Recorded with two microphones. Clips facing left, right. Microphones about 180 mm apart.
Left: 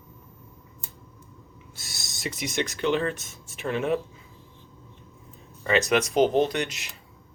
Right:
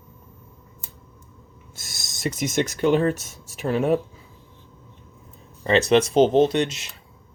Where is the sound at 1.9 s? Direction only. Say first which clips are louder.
Even; 15° right (ahead or behind).